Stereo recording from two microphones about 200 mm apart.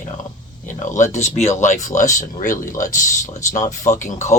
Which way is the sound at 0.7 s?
40° left (ahead or behind).